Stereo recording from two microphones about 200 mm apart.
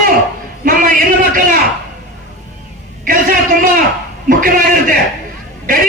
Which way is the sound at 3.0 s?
45° right (ahead or behind).